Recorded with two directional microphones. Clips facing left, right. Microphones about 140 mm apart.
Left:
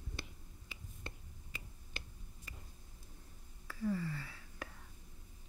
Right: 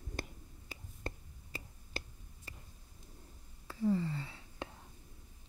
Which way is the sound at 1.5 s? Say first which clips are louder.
Right 6 dB; 35° right (ahead or behind).